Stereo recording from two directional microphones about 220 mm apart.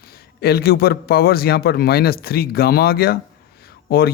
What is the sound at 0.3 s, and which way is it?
A man's voice, 45° left (ahead or behind).